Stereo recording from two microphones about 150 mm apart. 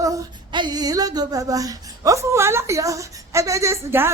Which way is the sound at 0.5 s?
30° right (ahead or behind).